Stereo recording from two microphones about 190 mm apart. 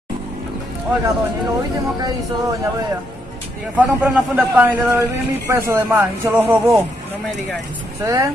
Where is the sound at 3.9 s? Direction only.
10° right (ahead or behind).